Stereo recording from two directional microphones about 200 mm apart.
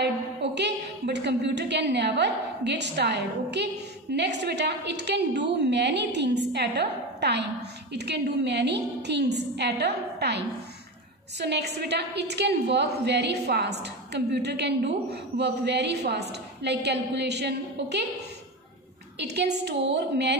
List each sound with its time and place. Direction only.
0.0 s a woman's voice: 60° right (ahead or behind)
19.1 s a woman's voice: 55° right (ahead or behind)